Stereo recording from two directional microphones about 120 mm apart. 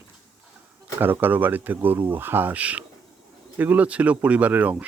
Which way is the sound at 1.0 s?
15° right (ahead or behind).